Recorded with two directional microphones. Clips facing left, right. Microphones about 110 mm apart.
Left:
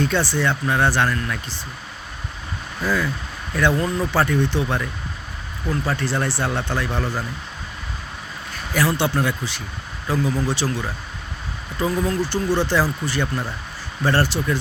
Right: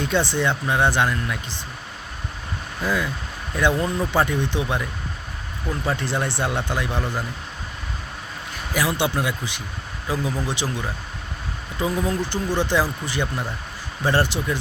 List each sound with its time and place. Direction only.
0.0 s speech: 20° right (ahead or behind)
2.8 s speech: 15° right (ahead or behind)
8.7 s speech: 15° right (ahead or behind)
12.0 s speech: 15° right (ahead or behind)